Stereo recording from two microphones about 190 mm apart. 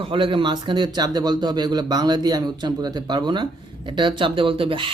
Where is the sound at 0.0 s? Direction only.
25° right (ahead or behind).